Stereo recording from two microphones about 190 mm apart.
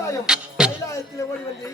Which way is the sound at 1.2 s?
15° left (ahead or behind).